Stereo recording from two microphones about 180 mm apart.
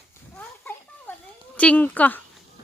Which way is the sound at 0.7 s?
10° left (ahead or behind).